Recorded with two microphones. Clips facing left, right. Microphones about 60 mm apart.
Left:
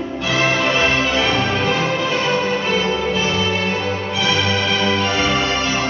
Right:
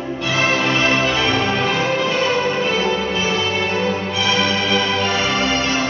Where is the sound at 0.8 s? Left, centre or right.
Centre.